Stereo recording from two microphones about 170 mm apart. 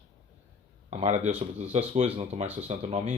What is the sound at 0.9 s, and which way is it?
Speech, 40° right (ahead or behind).